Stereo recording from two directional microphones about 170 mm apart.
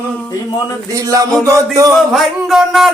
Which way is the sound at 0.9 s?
20° right (ahead or behind).